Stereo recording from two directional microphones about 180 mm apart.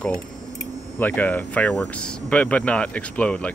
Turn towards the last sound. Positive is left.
turn(degrees=5)  # may be behind; listen again after turning